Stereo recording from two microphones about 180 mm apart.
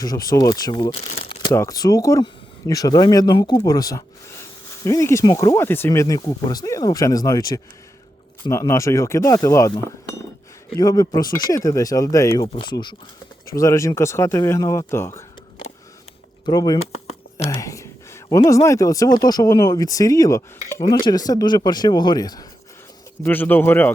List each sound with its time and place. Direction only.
0.0 s speech: 20° left (ahead or behind)
16.5 s speech: 20° left (ahead or behind)
23.2 s speech: 10° left (ahead or behind)